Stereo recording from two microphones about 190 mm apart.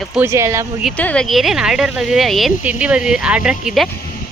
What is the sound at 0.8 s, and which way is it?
Speech, 5° left (ahead or behind).